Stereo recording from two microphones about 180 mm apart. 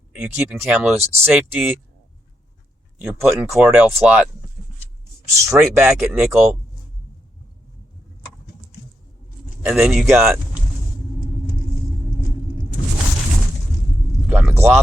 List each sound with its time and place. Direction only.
0.1 s speech: 10° right (ahead or behind)
3.0 s speech: 10° right (ahead or behind)
5.3 s speech: 15° right (ahead or behind)
9.6 s a man's voice: 5° right (ahead or behind)
14.3 s speech: 10° right (ahead or behind)